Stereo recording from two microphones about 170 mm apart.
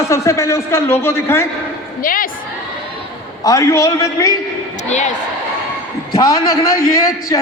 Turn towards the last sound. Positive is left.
turn(degrees=20)  # may be behind; listen again after turning